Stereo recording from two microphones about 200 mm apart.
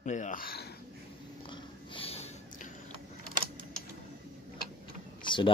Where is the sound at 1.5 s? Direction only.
25° left (ahead or behind).